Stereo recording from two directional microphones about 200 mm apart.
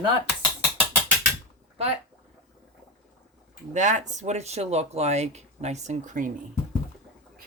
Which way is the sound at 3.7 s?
40° right (ahead or behind).